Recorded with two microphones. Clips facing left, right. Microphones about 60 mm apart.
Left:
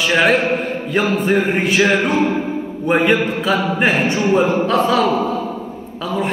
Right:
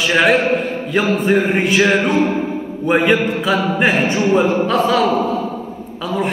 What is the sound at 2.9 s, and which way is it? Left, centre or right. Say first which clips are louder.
Music: right 1 dB; right.